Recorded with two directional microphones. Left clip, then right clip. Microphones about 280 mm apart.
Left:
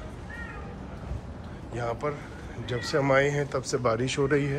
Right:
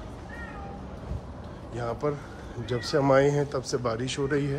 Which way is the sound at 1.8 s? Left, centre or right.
Centre.